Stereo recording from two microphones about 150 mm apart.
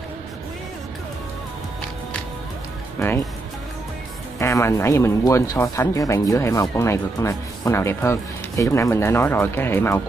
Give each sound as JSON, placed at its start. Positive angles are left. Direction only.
{"t": 4.4, "sound": "speech", "side_deg": 20}